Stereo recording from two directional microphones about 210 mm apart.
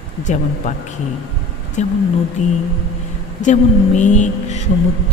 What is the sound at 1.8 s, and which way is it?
Speech, 35° left (ahead or behind).